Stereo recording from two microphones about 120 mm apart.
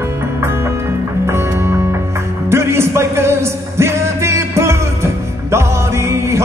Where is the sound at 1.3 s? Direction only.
20° right (ahead or behind).